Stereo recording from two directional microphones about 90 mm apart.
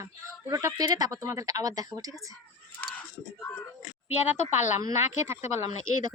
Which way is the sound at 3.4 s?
25° left (ahead or behind).